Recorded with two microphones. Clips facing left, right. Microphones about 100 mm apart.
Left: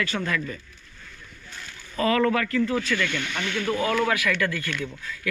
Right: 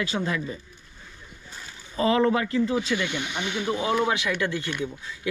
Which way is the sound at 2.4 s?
15° right (ahead or behind).